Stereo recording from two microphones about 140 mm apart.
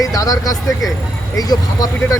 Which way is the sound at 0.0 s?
25° left (ahead or behind).